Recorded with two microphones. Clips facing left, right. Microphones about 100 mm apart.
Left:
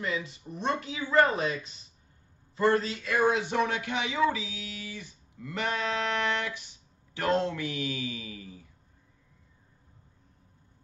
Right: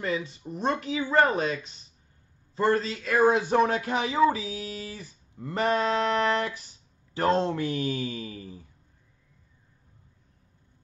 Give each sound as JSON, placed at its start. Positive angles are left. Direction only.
{"t": 0.0, "sound": "speech", "side_deg": -30}